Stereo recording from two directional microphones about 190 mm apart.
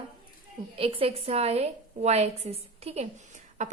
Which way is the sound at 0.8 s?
30° right (ahead or behind).